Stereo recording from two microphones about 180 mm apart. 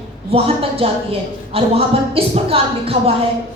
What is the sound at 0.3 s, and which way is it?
A woman's voice, 35° right (ahead or behind).